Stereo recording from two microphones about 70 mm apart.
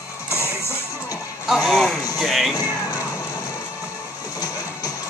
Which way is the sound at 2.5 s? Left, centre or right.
Left.